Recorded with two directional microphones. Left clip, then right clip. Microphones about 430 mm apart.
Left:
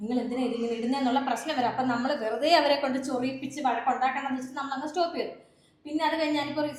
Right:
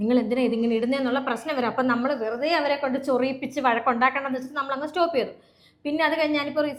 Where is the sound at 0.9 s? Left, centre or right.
Right.